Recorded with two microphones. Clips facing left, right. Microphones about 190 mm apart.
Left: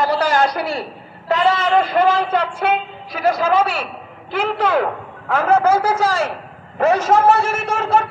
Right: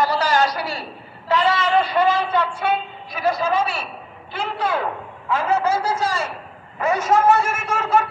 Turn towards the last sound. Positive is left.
turn(degrees=35)  # may be behind; listen again after turning